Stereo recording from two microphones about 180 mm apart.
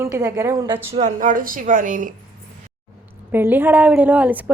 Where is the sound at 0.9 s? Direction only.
40° right (ahead or behind).